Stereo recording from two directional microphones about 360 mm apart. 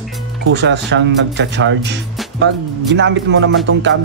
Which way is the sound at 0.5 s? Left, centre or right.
Right.